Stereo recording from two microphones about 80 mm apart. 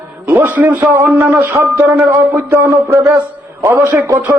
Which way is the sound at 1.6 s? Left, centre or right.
Right.